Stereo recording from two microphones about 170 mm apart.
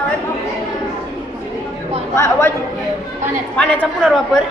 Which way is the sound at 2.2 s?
15° left (ahead or behind).